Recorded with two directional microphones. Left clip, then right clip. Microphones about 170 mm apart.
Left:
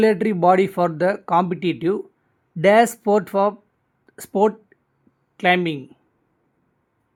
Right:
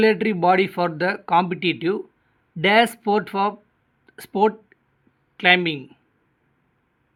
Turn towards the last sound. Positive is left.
turn(degrees=35)  # may be behind; listen again after turning